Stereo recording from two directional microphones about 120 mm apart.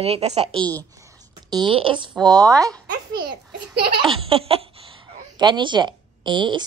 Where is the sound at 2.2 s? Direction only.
30° right (ahead or behind).